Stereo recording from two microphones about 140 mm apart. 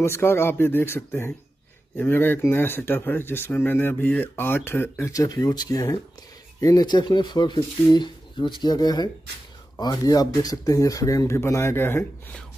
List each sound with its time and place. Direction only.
0.0 s speech: 15° left (ahead or behind)